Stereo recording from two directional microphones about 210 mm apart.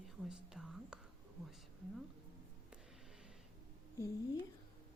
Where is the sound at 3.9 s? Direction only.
15° left (ahead or behind).